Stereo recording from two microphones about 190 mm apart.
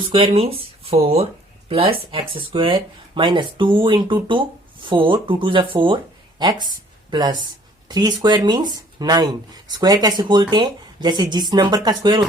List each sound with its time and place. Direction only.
0.1 s speech: 30° right (ahead or behind)